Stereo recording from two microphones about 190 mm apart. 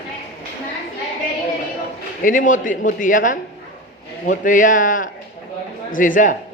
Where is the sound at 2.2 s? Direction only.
45° left (ahead or behind).